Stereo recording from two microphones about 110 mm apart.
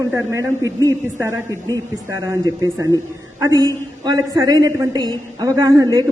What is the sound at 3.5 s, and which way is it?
Speech, 35° left (ahead or behind).